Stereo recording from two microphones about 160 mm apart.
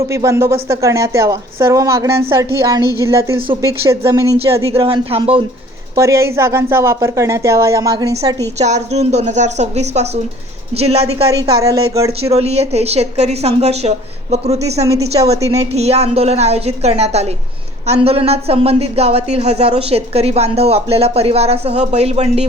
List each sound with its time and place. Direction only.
0.1 s a woman's voice: 20° right (ahead or behind)
4.8 s speech: 35° right (ahead or behind)
6.0 s speech: 20° right (ahead or behind)
8.5 s a woman's voice: 45° right (ahead or behind)
11.4 s a woman's voice: 20° right (ahead or behind)
12.2 s a woman's voice: 40° right (ahead or behind)